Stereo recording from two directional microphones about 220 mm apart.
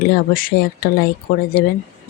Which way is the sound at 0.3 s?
40° left (ahead or behind).